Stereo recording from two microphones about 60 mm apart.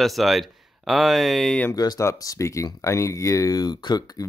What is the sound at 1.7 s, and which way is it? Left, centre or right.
Speech, left.